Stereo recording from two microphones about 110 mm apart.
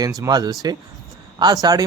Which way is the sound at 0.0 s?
35° right (ahead or behind).